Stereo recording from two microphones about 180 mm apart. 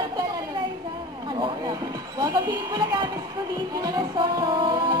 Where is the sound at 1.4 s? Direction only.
20° right (ahead or behind).